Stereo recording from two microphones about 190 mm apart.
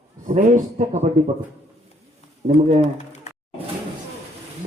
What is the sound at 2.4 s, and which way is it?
Speech, 35° right (ahead or behind).